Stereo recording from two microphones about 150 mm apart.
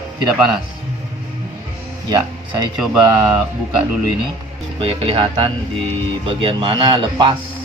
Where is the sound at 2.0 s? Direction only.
25° right (ahead or behind).